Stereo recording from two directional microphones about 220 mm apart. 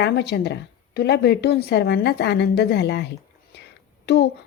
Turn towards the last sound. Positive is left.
turn(degrees=50)  # may be behind; listen again after turning